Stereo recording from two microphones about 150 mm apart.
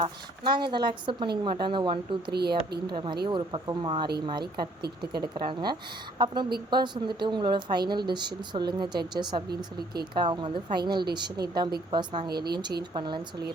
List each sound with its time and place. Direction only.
0.4 s speech: 30° right (ahead or behind)